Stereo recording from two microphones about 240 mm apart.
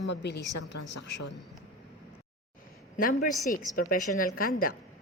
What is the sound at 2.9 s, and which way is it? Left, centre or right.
A woman's voice, left.